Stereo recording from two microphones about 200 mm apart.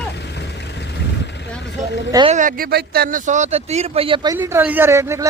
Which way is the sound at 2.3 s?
45° right (ahead or behind).